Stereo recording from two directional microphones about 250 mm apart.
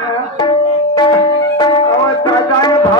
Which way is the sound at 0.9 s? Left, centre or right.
Centre.